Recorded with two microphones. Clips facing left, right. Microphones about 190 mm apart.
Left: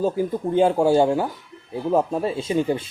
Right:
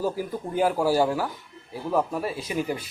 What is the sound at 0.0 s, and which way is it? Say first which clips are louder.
Speech: left 6 dB; 25° left (ahead or behind).